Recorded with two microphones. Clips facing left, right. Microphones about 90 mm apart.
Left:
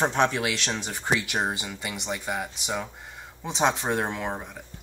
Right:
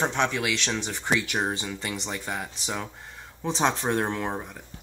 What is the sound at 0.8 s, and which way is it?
Speech, 10° left (ahead or behind).